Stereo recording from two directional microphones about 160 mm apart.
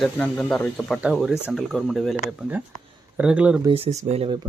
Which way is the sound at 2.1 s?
10° right (ahead or behind).